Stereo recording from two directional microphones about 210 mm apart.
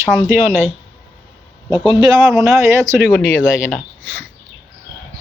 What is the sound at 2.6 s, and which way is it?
Speech, 15° right (ahead or behind).